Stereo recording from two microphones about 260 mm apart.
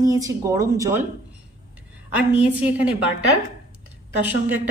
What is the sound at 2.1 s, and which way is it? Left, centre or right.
A woman's voice, centre.